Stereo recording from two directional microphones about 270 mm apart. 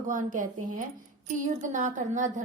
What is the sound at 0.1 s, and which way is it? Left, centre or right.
A woman's voice, right.